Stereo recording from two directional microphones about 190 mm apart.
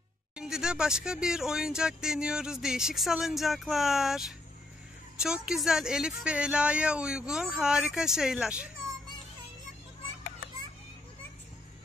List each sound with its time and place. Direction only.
0.4 s speech: 5° right (ahead or behind)